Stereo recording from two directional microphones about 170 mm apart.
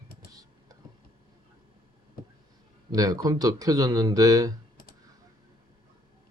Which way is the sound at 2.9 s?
20° right (ahead or behind).